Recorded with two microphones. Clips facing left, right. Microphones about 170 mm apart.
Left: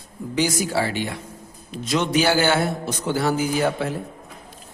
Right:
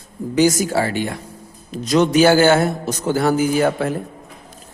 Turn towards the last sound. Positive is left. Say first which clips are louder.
# right 5 dB
turn(degrees=-50)  # may be behind; listen again after turning